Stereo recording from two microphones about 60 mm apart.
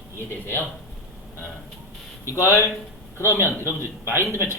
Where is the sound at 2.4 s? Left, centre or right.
Left.